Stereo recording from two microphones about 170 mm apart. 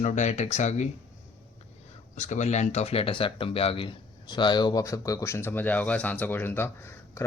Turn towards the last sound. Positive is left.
turn(degrees=15)  # may be behind; listen again after turning